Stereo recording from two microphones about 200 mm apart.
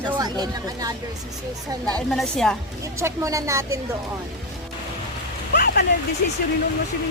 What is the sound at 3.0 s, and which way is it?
Speech, 15° right (ahead or behind).